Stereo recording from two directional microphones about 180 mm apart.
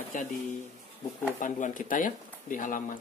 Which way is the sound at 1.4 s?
45° left (ahead or behind).